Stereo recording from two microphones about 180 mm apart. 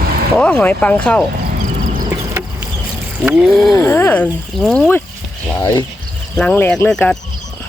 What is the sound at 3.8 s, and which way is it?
Speech, 10° left (ahead or behind).